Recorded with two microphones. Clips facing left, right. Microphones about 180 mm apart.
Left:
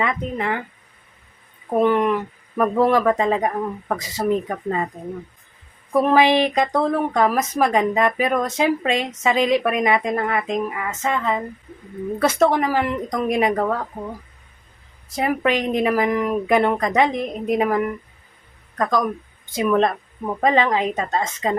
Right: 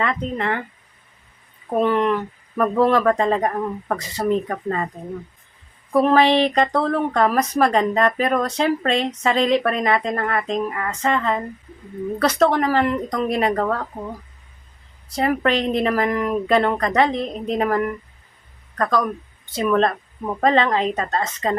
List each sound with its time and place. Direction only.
0.0 s speech: 10° left (ahead or behind)
1.8 s speech: 10° left (ahead or behind)
6.1 s speech: 15° left (ahead or behind)
15.1 s speech: 10° left (ahead or behind)